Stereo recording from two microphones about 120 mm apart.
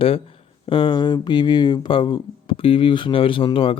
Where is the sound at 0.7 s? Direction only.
40° left (ahead or behind).